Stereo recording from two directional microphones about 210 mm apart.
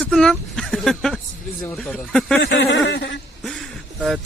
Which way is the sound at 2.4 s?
55° left (ahead or behind).